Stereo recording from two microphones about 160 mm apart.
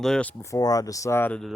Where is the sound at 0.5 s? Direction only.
20° left (ahead or behind); by 1.5 s 5° left (ahead or behind).